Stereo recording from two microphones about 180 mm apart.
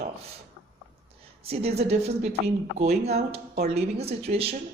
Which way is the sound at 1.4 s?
35° right (ahead or behind).